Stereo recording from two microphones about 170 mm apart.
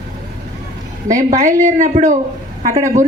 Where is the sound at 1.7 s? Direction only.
45° right (ahead or behind).